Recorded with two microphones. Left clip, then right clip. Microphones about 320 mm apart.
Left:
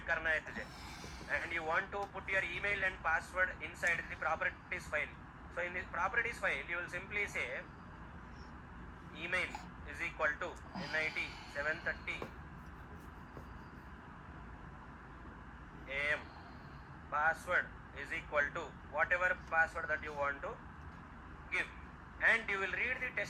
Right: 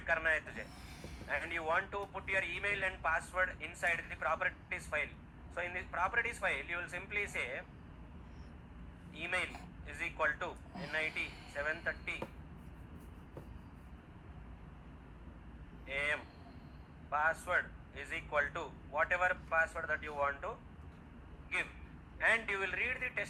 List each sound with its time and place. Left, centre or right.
0.0 s vehicle: centre
1.3 s speech: right
9.2 s speech: centre
15.9 s speech: centre
22.2 s speech: centre